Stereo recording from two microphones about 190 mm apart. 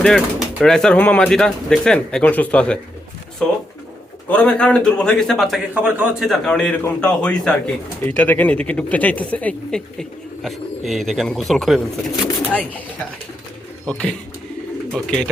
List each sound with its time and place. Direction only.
0.6 s speech: 5° left (ahead or behind)